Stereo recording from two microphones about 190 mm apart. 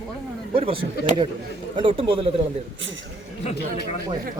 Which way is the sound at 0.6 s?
25° right (ahead or behind).